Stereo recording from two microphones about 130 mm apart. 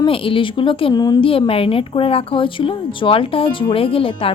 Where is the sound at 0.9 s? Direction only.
30° left (ahead or behind).